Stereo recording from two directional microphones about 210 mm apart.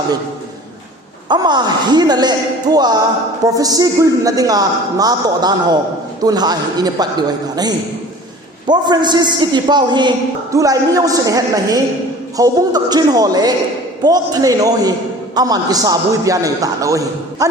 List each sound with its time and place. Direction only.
1.3 s a man's voice: 20° right (ahead or behind)